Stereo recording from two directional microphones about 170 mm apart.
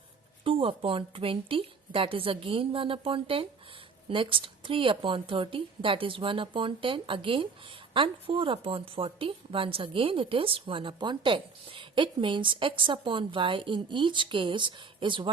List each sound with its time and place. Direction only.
0.4 s a woman's voice: 30° right (ahead or behind)